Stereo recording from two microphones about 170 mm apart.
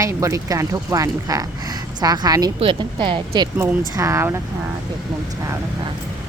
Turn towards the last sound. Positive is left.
turn(degrees=-15)  # may be behind; listen again after turning